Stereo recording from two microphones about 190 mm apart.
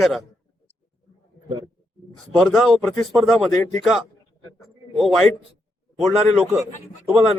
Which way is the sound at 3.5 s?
15° left (ahead or behind).